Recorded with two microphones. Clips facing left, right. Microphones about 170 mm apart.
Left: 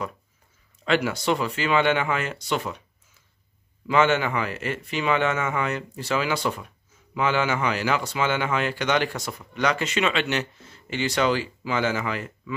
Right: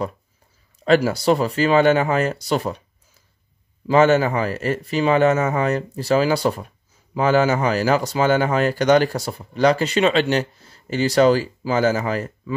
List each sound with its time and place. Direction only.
0.8 s speech: 35° right (ahead or behind)
3.8 s speech: 40° right (ahead or behind)